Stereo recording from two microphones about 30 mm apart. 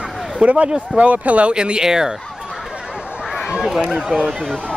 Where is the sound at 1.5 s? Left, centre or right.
Right.